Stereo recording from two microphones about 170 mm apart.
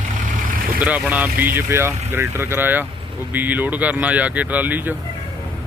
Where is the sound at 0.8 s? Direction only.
10° right (ahead or behind).